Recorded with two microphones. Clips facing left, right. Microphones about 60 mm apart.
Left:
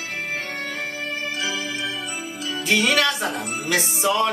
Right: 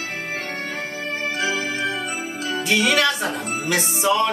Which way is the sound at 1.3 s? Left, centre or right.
Right.